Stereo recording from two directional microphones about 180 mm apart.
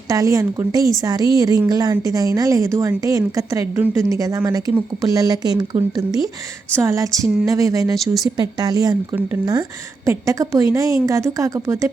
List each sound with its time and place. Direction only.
0.1 s a woman's voice: 20° right (ahead or behind)
7.9 s speech: centre (ahead or behind)
8.4 s a woman's voice: 20° right (ahead or behind)